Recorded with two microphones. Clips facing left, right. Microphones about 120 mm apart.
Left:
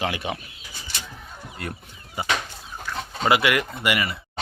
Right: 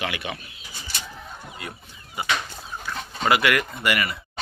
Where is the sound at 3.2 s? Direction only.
25° left (ahead or behind).